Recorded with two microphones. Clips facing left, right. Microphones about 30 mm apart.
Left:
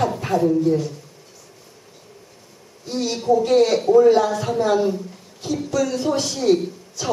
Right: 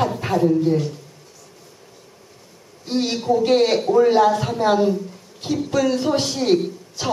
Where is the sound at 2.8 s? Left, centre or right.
Right.